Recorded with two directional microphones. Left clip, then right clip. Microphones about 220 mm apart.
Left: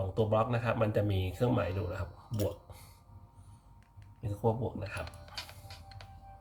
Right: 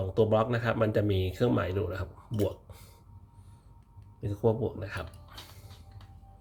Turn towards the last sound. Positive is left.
turn(degrees=-25)  # may be behind; listen again after turning